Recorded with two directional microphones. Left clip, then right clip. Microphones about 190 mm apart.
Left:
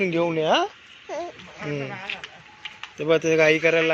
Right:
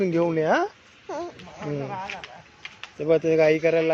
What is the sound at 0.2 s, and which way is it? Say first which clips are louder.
Speech: left 1 dB; 15° right (ahead or behind).